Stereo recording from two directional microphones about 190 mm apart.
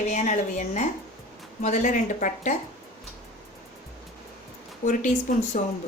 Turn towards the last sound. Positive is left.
turn(degrees=40)  # may be behind; listen again after turning